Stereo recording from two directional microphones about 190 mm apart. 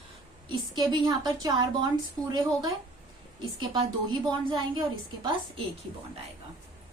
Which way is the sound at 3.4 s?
25° right (ahead or behind).